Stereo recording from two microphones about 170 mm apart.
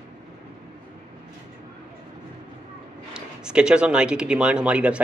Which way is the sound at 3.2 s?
5° right (ahead or behind).